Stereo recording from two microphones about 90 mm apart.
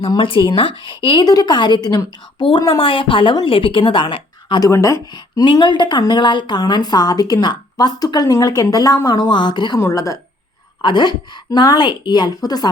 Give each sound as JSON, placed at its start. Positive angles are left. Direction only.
{"t": 0.2, "sound": "speech", "side_deg": 70}
{"t": 1.2, "sound": "speech", "side_deg": 50}
{"t": 2.4, "sound": "a woman's voice", "side_deg": 70}
{"t": 4.7, "sound": "speech", "side_deg": 35}
{"t": 5.5, "sound": "a woman's voice", "side_deg": 55}
{"t": 9.9, "sound": "speech", "side_deg": 40}
{"t": 10.8, "sound": "a woman's voice", "side_deg": 55}